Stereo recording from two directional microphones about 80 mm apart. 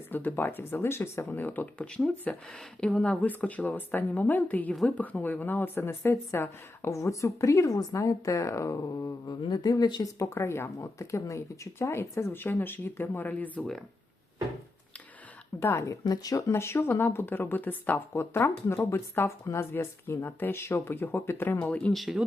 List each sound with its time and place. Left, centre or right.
0.1 s speech: left
10.2 s speech: left; by 13.7 s centre
15.6 s speech: left
16.5 s speech: left; by 21.9 s centre
21.9 s speech: centre